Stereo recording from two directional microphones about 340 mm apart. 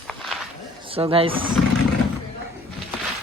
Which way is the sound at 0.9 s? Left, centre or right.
Centre.